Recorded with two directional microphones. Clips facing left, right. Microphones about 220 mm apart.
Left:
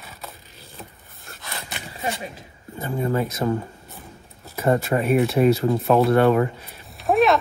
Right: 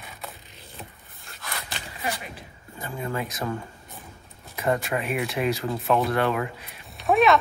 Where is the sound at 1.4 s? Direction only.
20° left (ahead or behind).